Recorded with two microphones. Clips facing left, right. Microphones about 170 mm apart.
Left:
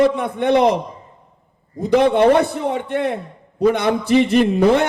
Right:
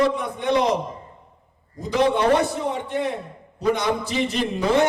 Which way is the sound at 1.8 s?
60° left (ahead or behind).